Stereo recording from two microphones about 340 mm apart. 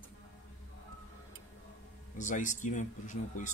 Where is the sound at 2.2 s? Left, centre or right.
Left.